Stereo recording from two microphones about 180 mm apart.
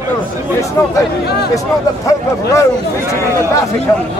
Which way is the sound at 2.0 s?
15° left (ahead or behind).